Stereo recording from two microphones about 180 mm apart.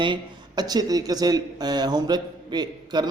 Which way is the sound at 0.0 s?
25° right (ahead or behind).